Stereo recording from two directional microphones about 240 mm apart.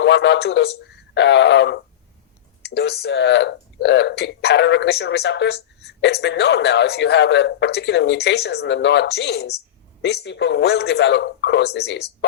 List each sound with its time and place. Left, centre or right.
0.0 s speech: left